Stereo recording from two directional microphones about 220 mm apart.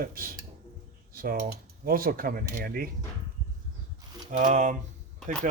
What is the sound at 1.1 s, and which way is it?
Typing, 40° right (ahead or behind).